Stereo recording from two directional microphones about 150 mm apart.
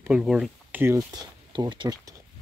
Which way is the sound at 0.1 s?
5° right (ahead or behind).